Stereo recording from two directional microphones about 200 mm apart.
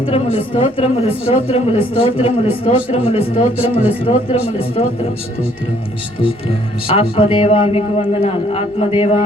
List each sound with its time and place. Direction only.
0.1 s speech: 25° left (ahead or behind)
6.1 s speech: 25° left (ahead or behind)